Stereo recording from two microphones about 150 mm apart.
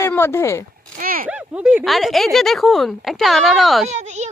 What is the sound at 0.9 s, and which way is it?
Speech, 70° right (ahead or behind).